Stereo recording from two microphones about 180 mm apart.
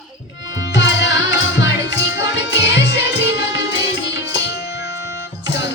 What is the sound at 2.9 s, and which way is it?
Music, 75° left (ahead or behind).